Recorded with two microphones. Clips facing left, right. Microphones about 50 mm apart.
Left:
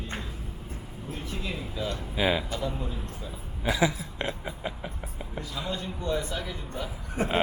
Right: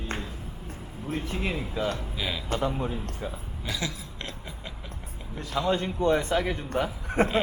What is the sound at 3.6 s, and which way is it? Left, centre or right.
Speech, centre.